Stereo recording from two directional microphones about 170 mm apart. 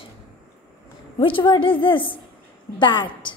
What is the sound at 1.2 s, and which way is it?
A woman's voice, 30° left (ahead or behind).